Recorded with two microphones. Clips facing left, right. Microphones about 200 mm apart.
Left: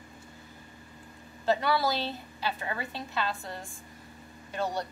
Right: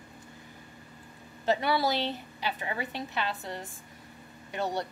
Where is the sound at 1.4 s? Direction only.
20° right (ahead or behind).